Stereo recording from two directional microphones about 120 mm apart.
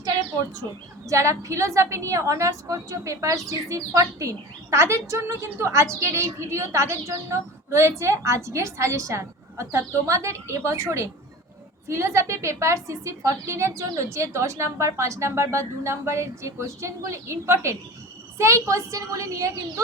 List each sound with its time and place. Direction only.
1.0 s a woman's voice: 25° right (ahead or behind)